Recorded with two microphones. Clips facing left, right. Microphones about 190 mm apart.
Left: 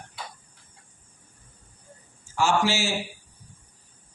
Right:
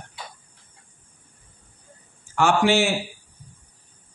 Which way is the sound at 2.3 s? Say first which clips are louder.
Right 5 dB; 60° right (ahead or behind).